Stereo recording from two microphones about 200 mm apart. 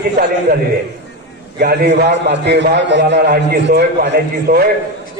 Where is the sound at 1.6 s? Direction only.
50° right (ahead or behind).